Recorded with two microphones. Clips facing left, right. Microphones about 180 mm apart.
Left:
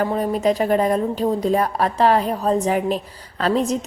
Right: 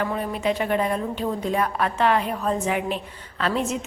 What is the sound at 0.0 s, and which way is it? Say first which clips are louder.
A woman's voice: left 6 dB; 40° left (ahead or behind).